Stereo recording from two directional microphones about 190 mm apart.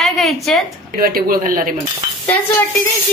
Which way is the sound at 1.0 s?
50° right (ahead or behind).